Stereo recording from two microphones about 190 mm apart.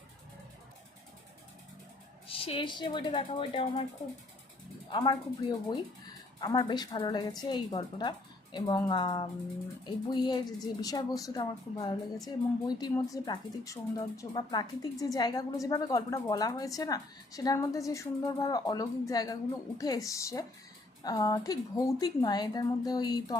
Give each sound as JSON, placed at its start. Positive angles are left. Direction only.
{"t": 2.2, "sound": "speech", "side_deg": 30}
{"t": 4.9, "sound": "a woman's voice", "side_deg": 25}